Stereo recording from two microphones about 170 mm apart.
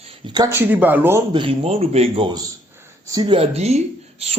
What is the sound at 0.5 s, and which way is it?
Speech, 10° right (ahead or behind).